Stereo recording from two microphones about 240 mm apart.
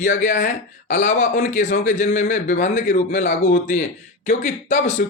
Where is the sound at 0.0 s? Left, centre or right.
Left.